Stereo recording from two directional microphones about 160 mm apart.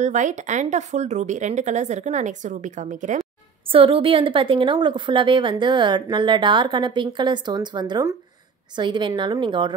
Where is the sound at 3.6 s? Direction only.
35° right (ahead or behind).